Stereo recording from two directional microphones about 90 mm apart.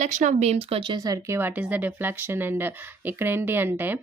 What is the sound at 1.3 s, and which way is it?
Speech, 25° right (ahead or behind).